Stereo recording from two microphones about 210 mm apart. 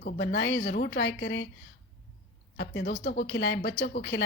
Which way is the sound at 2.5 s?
50° left (ahead or behind).